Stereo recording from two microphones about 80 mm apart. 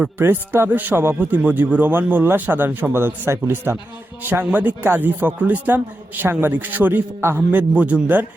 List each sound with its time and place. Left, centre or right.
0.2 s speech: right